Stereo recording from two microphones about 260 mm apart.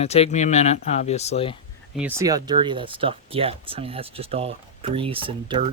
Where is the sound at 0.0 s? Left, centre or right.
Left.